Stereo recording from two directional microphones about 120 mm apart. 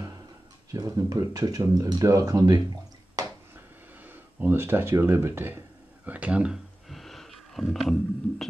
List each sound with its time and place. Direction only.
0.7 s speech: 30° right (ahead or behind)
4.0 s speech: 15° right (ahead or behind)
6.0 s a sound: 10° right (ahead or behind)